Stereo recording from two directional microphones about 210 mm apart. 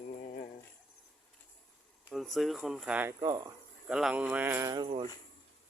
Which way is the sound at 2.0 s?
Centre (ahead or behind).